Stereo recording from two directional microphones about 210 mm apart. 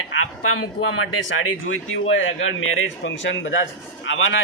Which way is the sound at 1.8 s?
65° left (ahead or behind).